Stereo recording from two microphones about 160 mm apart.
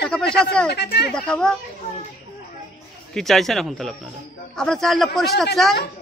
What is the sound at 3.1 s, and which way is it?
Speech, centre (ahead or behind).